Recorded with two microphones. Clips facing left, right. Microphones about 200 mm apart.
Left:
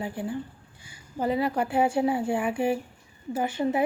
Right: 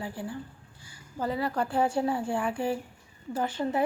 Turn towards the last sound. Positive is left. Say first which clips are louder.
# left 3 dB
turn(degrees=10)  # may be behind; listen again after turning